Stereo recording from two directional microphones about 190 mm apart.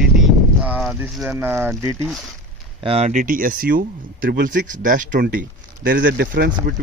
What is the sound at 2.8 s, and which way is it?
Speech, 30° right (ahead or behind).